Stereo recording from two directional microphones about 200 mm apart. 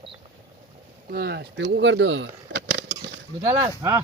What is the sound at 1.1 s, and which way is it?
Speech, 50° right (ahead or behind).